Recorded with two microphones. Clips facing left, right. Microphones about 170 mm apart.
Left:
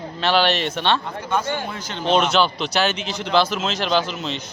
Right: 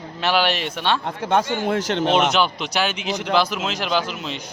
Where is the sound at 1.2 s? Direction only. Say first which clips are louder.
Right 5 dB; 80° right.